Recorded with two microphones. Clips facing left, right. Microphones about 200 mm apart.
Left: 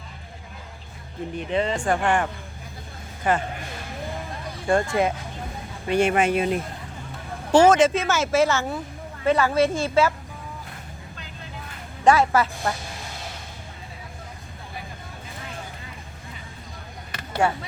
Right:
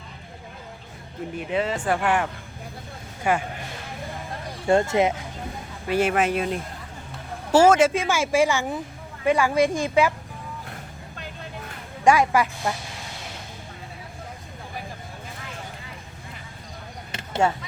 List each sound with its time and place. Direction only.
1.4 s speech: 5° right (ahead or behind)
4.6 s speech: 25° right (ahead or behind)
5.9 s speech: 5° right (ahead or behind)
12.0 s speech: 15° right (ahead or behind)
17.1 s a sound: 25° right (ahead or behind)